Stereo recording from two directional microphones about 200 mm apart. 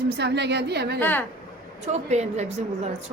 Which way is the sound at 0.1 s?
60° right (ahead or behind).